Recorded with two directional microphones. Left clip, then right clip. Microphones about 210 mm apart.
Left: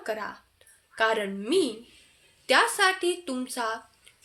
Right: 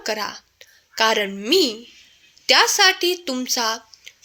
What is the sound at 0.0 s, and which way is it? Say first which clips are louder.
A woman's voice: right 7 dB; 35° right (ahead or behind).